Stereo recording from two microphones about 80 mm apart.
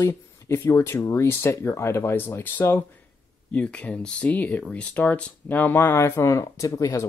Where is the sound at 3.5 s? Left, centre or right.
Centre.